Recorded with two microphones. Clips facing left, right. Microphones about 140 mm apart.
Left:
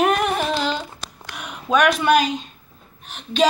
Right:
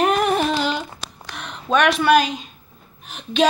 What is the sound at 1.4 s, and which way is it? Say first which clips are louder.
A woman's voice: even; 5° left (ahead or behind).